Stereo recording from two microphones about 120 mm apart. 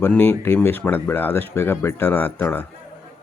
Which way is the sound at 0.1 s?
15° left (ahead or behind).